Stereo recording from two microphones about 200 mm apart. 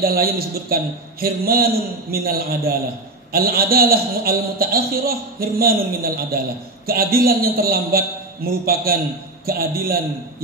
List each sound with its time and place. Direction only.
0.0 s a man's voice: 50° right (ahead or behind)